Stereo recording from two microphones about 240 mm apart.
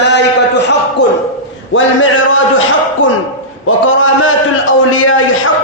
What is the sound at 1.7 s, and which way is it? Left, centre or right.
Speech, left.